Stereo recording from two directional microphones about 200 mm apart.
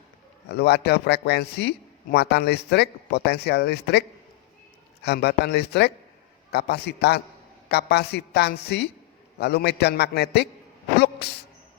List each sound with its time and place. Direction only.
0.4 s a man's voice: 55° left (ahead or behind)
5.0 s a man's voice: 55° left (ahead or behind)
10.9 s a sound: 55° left (ahead or behind)